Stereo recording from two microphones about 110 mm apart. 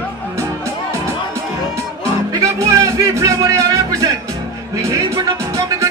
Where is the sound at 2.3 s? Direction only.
30° right (ahead or behind).